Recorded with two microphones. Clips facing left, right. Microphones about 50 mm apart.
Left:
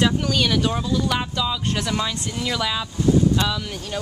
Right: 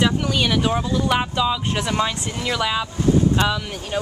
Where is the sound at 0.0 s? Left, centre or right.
Centre.